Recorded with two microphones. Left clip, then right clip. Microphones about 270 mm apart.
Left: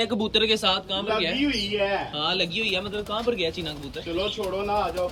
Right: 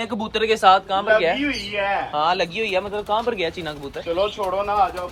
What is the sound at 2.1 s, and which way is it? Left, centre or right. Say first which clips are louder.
Speech: right 5 dB; centre.